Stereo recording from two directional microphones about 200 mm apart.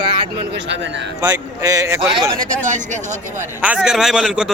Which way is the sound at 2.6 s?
40° right (ahead or behind).